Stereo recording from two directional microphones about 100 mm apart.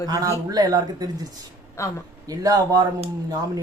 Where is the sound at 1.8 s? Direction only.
25° left (ahead or behind).